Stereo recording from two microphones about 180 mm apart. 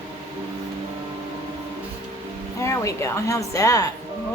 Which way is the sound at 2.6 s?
15° left (ahead or behind).